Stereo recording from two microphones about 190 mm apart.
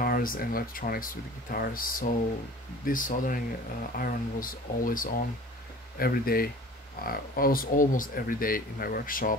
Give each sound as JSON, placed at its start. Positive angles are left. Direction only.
{"t": 0.0, "sound": "speech", "side_deg": 50}